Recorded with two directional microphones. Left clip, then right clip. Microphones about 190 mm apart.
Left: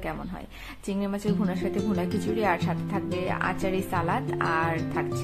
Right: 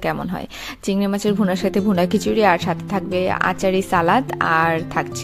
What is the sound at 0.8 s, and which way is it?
A woman's voice, 50° right (ahead or behind).